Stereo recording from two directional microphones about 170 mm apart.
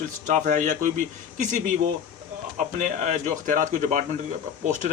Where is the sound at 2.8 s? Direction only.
50° right (ahead or behind).